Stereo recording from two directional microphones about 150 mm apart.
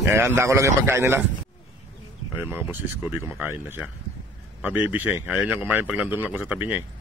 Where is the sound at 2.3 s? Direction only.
15° right (ahead or behind).